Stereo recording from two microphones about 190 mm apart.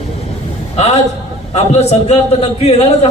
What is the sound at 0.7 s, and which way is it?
A man's voice, 35° left (ahead or behind).